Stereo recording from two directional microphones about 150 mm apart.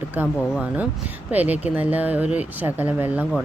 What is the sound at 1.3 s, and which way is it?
Speech, 10° right (ahead or behind).